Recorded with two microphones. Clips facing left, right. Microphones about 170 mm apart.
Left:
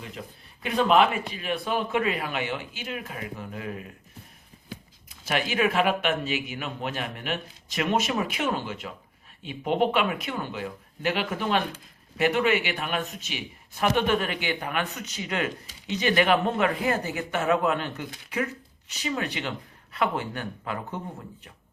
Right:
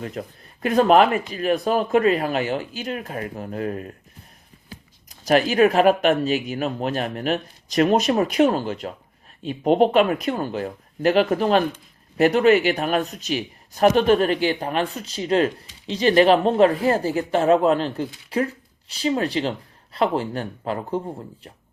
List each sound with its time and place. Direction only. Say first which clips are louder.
0.0 s speech: right 8 dB; 45° right (ahead or behind)
5.0 s speech: right 10 dB; 40° right (ahead or behind)